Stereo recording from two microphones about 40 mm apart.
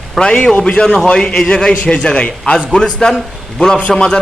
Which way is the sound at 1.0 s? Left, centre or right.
Left.